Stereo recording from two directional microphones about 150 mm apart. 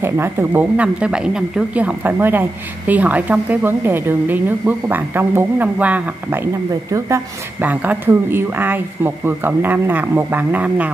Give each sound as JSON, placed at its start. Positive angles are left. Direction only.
{"t": 0.0, "sound": "a woman's voice", "side_deg": -15}
{"t": 6.7, "sound": "speech", "side_deg": -20}
{"t": 7.6, "sound": "a woman's voice", "side_deg": -10}